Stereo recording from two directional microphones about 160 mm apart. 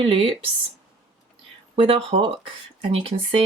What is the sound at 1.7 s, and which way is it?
Speech, 35° right (ahead or behind).